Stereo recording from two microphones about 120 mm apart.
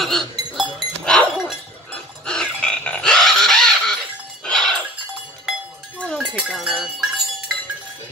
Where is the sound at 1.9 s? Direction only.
5° left (ahead or behind).